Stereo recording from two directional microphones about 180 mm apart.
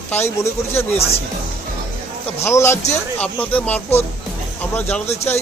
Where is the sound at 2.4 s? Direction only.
15° left (ahead or behind).